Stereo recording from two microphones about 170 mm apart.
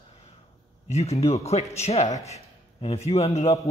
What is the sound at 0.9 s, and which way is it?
A man's voice, 40° left (ahead or behind).